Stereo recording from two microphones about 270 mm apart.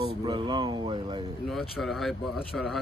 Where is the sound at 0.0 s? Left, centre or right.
Centre.